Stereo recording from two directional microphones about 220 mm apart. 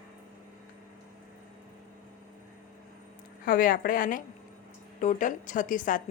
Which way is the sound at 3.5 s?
40° left (ahead or behind).